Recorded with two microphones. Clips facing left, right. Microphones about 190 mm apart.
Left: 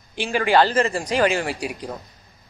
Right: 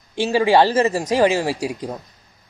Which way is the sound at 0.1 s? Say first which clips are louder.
Right 4 dB; 25° right (ahead or behind).